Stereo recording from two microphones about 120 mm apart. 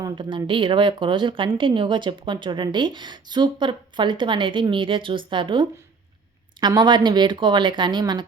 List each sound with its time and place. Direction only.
0.2 s a woman's voice: 40° right (ahead or behind)